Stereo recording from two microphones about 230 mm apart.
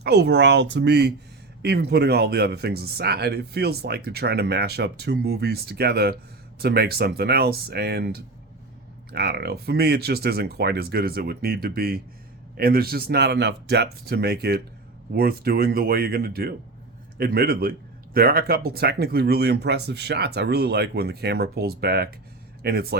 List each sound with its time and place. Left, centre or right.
0.0 s speech: right